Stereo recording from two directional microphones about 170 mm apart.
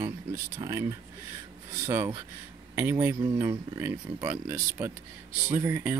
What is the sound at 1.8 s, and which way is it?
Speech, 15° right (ahead or behind).